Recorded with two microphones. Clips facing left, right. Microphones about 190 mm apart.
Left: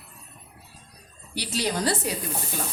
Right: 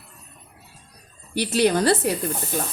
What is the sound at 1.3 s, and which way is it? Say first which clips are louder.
Speech: right 8 dB; 55° right (ahead or behind).